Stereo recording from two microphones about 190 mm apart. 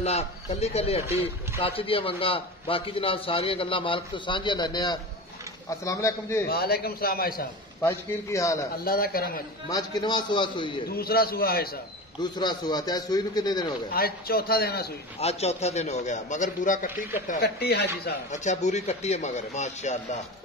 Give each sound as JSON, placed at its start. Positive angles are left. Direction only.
{"t": 0.0, "sound": "a man's voice", "side_deg": 35}
{"t": 6.4, "sound": "a man's voice", "side_deg": 55}
{"t": 7.8, "sound": "a man's voice", "side_deg": 15}
{"t": 8.8, "sound": "a man's voice", "side_deg": 50}
{"t": 9.7, "sound": "a man's voice", "side_deg": 20}
{"t": 10.9, "sound": "a man's voice", "side_deg": 55}
{"t": 12.2, "sound": "a man's voice", "side_deg": 20}
{"t": 13.9, "sound": "a man's voice", "side_deg": 50}
{"t": 15.1, "sound": "a man's voice", "side_deg": 35}
{"t": 18.3, "sound": "a man's voice", "side_deg": 40}